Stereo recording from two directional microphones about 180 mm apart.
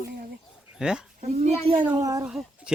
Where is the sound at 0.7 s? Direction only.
5° right (ahead or behind).